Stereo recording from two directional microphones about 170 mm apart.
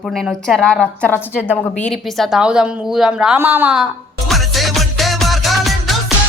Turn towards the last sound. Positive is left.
turn(degrees=0)  # may be behind; listen again after turning